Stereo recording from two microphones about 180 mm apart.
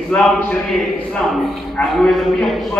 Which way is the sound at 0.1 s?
5° left (ahead or behind).